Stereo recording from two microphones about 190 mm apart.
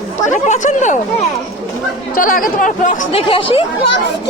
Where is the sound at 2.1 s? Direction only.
45° left (ahead or behind); by 3.6 s 30° left (ahead or behind).